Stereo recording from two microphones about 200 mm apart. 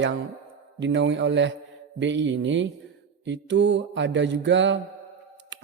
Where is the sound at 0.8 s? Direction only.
65° right (ahead or behind).